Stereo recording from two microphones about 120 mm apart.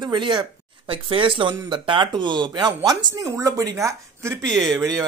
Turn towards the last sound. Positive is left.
turn(degrees=5)  # may be behind; listen again after turning